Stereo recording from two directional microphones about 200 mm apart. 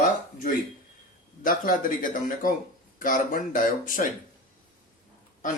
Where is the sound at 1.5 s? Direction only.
45° left (ahead or behind).